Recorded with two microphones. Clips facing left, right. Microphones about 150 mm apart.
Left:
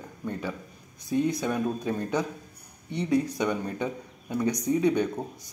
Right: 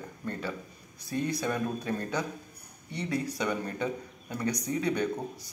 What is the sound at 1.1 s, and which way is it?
Speech, 20° left (ahead or behind).